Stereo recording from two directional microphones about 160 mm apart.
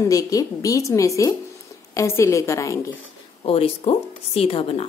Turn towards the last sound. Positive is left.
turn(degrees=40)  # may be behind; listen again after turning